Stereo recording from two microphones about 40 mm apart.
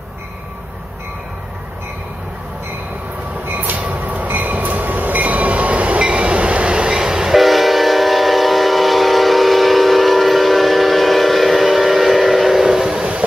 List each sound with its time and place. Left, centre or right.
3.4 s train: right; by 7.3 s centre
7.3 s train: centre